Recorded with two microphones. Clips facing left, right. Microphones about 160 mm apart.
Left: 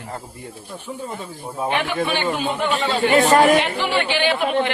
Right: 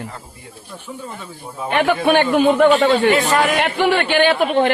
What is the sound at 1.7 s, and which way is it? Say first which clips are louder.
Speech: right 9 dB; 50° right (ahead or behind).